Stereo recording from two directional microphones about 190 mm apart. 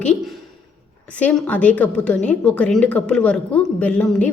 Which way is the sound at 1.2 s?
10° left (ahead or behind).